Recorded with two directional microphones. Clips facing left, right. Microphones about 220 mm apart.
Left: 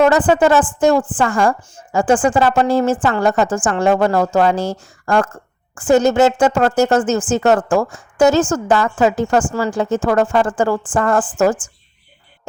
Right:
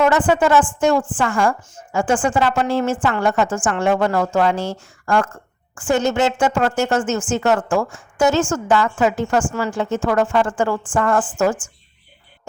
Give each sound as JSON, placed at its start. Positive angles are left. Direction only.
{"t": 0.1, "sound": "a woman's voice", "side_deg": 35}